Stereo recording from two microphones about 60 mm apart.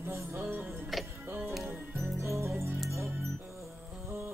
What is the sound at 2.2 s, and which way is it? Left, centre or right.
Music, right.